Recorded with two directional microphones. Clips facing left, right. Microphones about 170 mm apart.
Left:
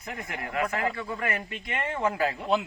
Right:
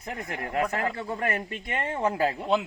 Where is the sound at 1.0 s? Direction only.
40° right (ahead or behind).